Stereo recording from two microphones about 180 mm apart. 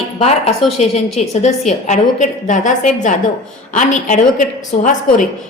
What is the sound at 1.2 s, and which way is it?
A woman's voice, 40° left (ahead or behind).